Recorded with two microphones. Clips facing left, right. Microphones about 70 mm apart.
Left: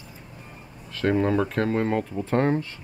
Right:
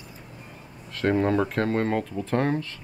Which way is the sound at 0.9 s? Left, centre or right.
Centre.